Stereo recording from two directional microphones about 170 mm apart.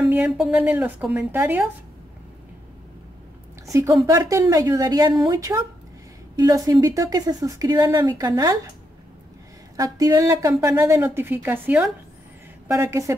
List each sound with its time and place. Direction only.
0.1 s speech: 5° right (ahead or behind)
3.7 s speech: 20° right (ahead or behind)
9.8 s speech: 20° right (ahead or behind)